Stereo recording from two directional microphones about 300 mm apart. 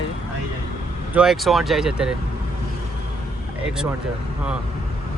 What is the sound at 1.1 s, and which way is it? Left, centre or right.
Speech, centre.